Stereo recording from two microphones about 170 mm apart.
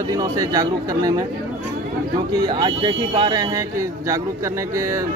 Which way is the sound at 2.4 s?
25° right (ahead or behind).